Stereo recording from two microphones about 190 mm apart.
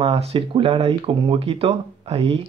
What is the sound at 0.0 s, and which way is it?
Speech, 30° right (ahead or behind).